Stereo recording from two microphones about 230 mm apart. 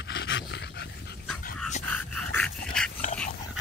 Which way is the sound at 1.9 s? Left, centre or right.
Centre.